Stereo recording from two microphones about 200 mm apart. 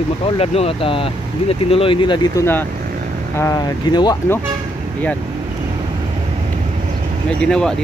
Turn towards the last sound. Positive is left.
turn(degrees=5)  # may be behind; listen again after turning